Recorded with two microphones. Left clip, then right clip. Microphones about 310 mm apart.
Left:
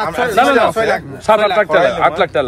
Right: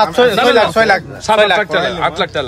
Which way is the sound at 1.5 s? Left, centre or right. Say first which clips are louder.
Left 3 dB; left.